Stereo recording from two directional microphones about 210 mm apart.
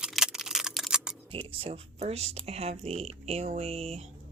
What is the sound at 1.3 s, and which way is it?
Speech, 25° right (ahead or behind).